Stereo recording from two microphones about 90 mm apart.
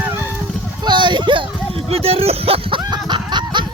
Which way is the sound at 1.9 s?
90° right.